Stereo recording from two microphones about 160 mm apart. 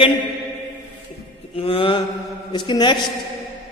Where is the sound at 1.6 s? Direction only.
35° left (ahead or behind).